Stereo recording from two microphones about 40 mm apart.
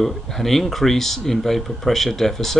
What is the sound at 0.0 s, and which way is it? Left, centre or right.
Speech, centre.